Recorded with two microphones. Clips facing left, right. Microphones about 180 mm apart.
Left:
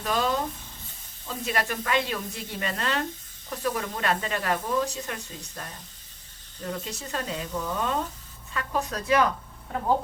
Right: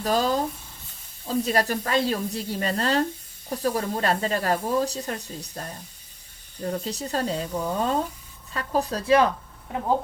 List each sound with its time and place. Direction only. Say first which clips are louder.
0.0 s speech: right 3 dB; 35° right (ahead or behind)